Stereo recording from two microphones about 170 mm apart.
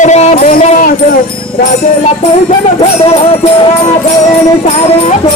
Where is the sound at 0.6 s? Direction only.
55° left (ahead or behind).